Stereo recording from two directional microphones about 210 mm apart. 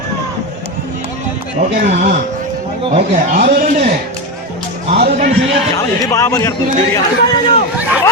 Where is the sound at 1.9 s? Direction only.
35° right (ahead or behind).